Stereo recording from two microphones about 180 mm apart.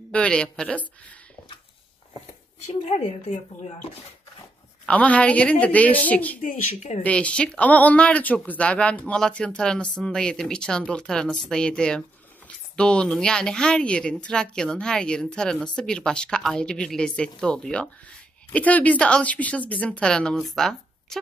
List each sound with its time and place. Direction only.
0.1 s speech: 5° left (ahead or behind)
2.7 s speech: 35° left (ahead or behind)
4.8 s speech: 5° left (ahead or behind)
6.4 s speech: 45° left (ahead or behind)
7.0 s speech: 5° left (ahead or behind)